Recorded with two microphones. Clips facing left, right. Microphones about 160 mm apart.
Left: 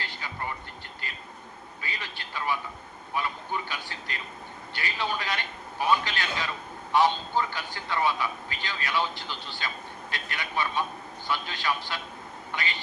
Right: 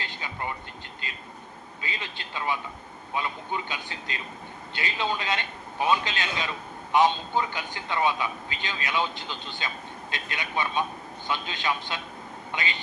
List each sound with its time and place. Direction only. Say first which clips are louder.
0.0 s vehicle: right 1 dB; 20° right (ahead or behind)
1.0 s a man's voice: right 1 dB; 20° right (ahead or behind)